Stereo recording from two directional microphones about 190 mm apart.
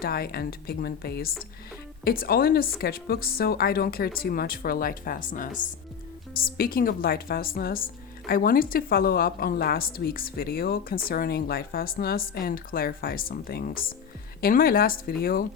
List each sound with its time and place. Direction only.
0.0 s a woman's voice: 55° left (ahead or behind)